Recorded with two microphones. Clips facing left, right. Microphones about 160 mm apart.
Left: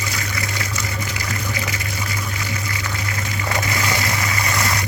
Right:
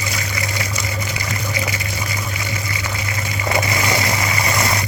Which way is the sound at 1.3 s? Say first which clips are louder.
Right 3 dB; 15° right (ahead or behind).